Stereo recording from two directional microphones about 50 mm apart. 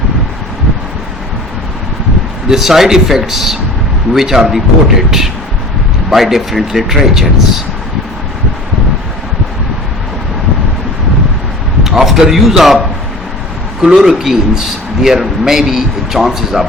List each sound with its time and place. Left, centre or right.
2.5 s speech: centre
11.8 s a man's voice: centre
13.8 s speech: centre